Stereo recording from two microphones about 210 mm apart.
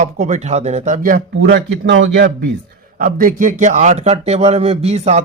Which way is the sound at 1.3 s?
55° right (ahead or behind).